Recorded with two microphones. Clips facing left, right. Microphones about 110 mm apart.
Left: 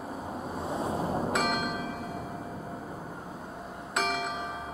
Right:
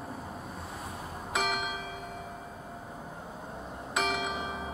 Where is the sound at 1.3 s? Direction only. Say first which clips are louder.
Left 3 dB; centre (ahead or behind).